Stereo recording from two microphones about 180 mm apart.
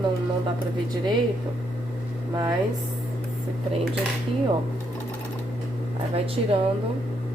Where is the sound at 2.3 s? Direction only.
20° right (ahead or behind).